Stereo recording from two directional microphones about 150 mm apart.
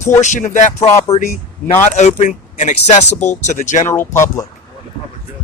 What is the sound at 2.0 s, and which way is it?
Speech, 50° left (ahead or behind).